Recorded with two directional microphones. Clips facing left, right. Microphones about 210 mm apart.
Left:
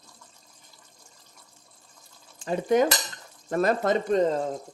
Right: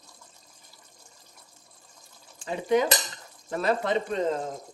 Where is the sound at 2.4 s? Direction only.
45° left (ahead or behind).